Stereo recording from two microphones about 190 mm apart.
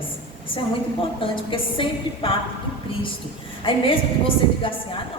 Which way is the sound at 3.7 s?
25° left (ahead or behind).